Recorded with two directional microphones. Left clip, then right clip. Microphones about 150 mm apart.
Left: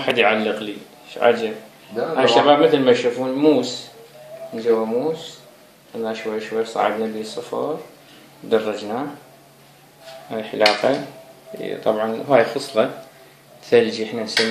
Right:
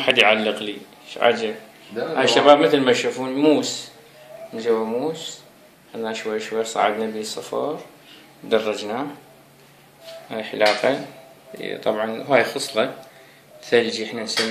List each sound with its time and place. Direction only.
0.0 s a man's voice: 15° right (ahead or behind)
10.3 s speech: 5° left (ahead or behind)